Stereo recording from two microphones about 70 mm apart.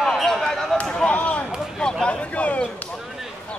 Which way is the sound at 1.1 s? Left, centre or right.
Centre.